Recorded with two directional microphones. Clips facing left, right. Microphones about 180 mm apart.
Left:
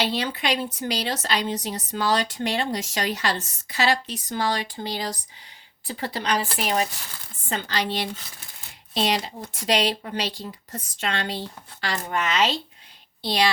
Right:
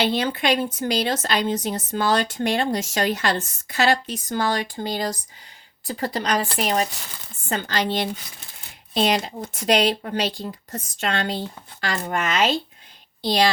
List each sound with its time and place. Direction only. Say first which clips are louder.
0.0 s speech: right 4 dB; 50° right (ahead or behind)